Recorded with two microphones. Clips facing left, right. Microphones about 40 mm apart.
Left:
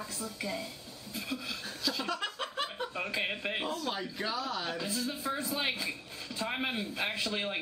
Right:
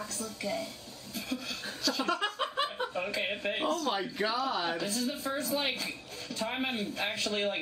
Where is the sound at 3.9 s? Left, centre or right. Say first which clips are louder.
Right 4 dB; centre.